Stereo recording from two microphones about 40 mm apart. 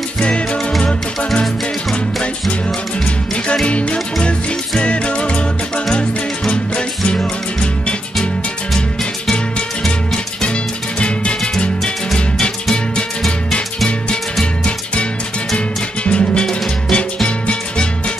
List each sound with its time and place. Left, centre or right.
0.2 s music: left
0.7 s music: centre
3.6 s music: left
9.8 s music: centre
11.8 s music: centre
14.4 s music: left